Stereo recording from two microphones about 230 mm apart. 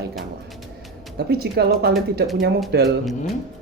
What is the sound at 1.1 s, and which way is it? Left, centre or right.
Speech, right.